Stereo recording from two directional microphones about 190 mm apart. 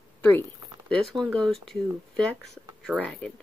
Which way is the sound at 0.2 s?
10° left (ahead or behind).